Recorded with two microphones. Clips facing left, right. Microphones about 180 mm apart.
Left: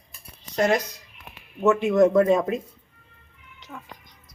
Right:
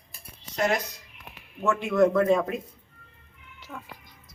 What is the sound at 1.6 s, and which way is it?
Speech, 20° left (ahead or behind).